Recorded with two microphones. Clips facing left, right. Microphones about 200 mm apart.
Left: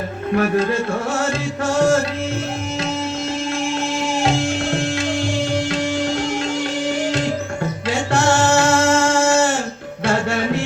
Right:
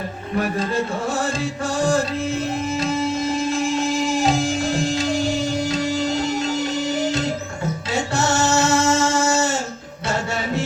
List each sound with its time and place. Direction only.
0.3 s speech: 65° left (ahead or behind)
8.1 s music: 65° left (ahead or behind)